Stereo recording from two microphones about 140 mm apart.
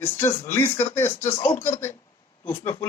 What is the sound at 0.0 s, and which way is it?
A man's voice, 15° left (ahead or behind).